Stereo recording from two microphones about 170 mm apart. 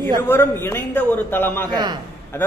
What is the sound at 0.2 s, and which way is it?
A man's voice, 15° left (ahead or behind).